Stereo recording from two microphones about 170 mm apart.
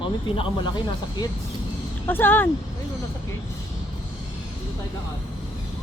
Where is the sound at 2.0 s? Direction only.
10° left (ahead or behind).